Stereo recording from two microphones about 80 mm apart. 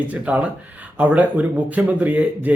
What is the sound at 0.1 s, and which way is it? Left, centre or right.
Speech, centre.